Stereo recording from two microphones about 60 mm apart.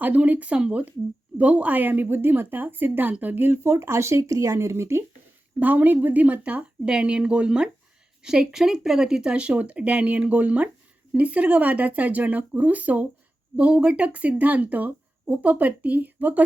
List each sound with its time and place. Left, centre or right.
0.0 s a woman's voice: right
5.5 s a woman's voice: right